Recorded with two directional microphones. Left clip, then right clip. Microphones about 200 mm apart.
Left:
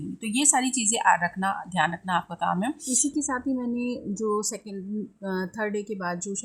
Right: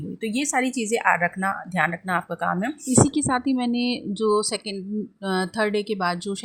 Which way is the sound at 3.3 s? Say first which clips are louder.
Right 5 dB; 40° right (ahead or behind).